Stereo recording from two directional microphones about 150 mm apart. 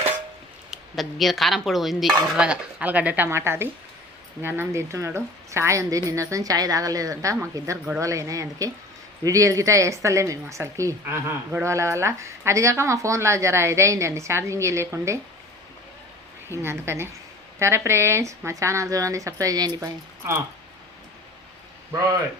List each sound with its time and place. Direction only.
0.7 s dishes: centre (ahead or behind); by 3.7 s 15° right (ahead or behind)
4.4 s a woman's voice: 15° right (ahead or behind)
16.6 s a woman's voice: 15° right (ahead or behind)